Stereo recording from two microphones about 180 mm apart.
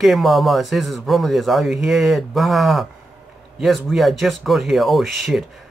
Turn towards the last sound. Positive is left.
turn(degrees=0)  # may be behind; listen again after turning